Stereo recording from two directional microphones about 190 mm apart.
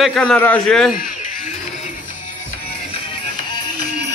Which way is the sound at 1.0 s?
45° left (ahead or behind).